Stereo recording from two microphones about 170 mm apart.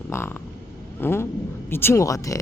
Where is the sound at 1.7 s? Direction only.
15° left (ahead or behind).